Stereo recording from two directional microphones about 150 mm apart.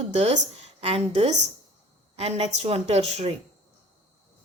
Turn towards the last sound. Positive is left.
turn(degrees=-45)  # may be behind; listen again after turning